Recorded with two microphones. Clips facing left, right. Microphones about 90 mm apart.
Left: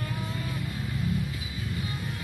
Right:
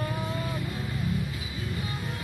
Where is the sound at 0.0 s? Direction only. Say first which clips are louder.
Right 3 dB; 30° right (ahead or behind).